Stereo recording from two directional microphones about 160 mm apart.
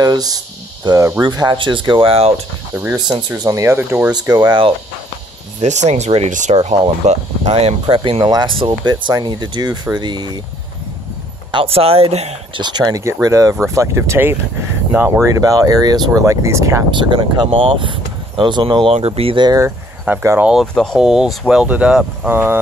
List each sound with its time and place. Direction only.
0.0 s speech: 25° right (ahead or behind)
2.7 s speech: 10° right (ahead or behind)
4.1 s speech: 25° right (ahead or behind)
5.6 s speech: 45° right (ahead or behind); by 10.4 s 25° right (ahead or behind)
11.5 s speech: 35° right (ahead or behind)
12.6 s speech: 25° right (ahead or behind)
16.9 s speech: 30° right (ahead or behind)
20.1 s speech: 10° right (ahead or behind)
20.7 s speech: 5° left (ahead or behind); by 22.6 s 15° right (ahead or behind)